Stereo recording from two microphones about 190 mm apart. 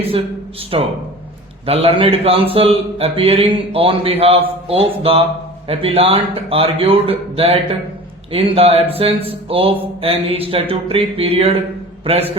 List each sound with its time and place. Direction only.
0.7 s a man's voice: 30° right (ahead or behind)